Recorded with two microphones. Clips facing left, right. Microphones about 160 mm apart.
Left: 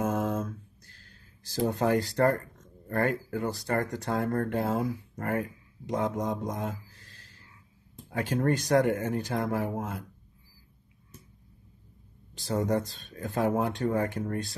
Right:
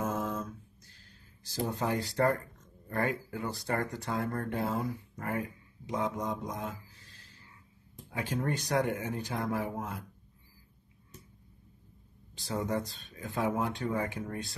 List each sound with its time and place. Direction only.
0.0 s a sound: 65° left (ahead or behind)
1.5 s speech: 70° left (ahead or behind)
2.0 s speech: 45° left (ahead or behind)
8.1 s speech: 65° left (ahead or behind)
8.7 s speech: 55° left (ahead or behind)
12.4 s speech: 45° left (ahead or behind)
12.7 s speech: 75° left (ahead or behind)
13.2 s speech: 55° left (ahead or behind)